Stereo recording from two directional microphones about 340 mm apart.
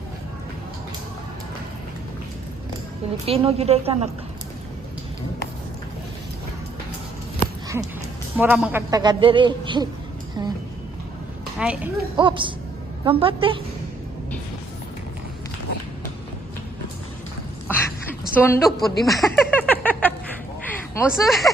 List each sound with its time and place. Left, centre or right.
3.2 s speech: centre
8.4 s speech: centre
11.6 s speech: centre
12.1 s speech: centre
17.7 s chuckle: centre
20.7 s speech: centre